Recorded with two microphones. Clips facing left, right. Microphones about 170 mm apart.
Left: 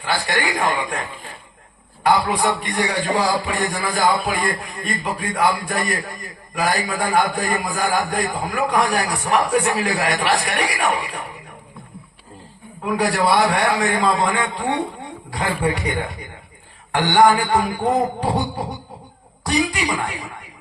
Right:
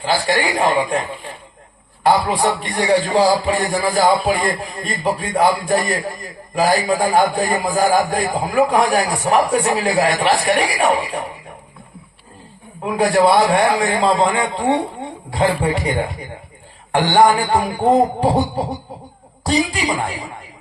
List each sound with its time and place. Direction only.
0.0 s speech: 30° right (ahead or behind)
2.0 s speech: 30° right (ahead or behind)
12.8 s speech: 25° right (ahead or behind)
17.2 s speech: 30° right (ahead or behind)